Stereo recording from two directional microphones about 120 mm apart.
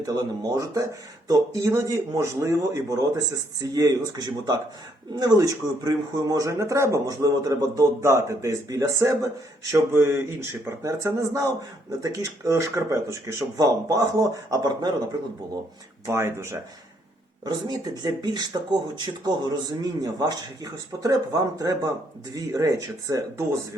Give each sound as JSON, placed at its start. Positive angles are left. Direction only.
{"t": 0.0, "sound": "speech", "side_deg": -30}
{"t": 16.0, "sound": "speech", "side_deg": -20}
{"t": 17.4, "sound": "speech", "side_deg": -35}